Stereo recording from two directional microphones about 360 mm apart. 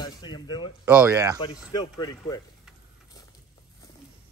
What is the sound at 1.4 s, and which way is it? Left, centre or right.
A woman's voice, centre.